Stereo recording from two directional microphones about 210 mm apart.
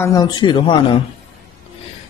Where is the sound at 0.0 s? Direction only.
15° left (ahead or behind).